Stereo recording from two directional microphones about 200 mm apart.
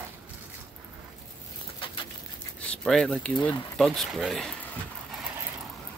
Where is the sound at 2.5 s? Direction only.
5° left (ahead or behind).